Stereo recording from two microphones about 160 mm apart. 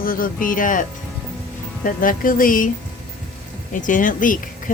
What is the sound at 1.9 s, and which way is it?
Speech, 60° left (ahead or behind).